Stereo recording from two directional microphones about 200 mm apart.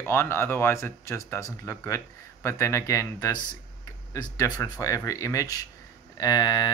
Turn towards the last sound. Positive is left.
turn(degrees=20)  # may be behind; listen again after turning